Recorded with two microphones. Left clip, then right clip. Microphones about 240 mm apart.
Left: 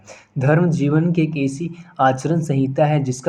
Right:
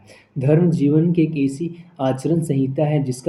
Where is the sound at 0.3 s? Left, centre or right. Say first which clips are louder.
Even; left.